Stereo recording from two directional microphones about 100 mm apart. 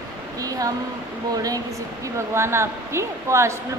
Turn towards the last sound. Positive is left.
turn(degrees=-30)  # may be behind; listen again after turning